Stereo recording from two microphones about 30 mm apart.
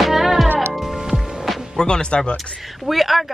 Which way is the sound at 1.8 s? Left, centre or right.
Left.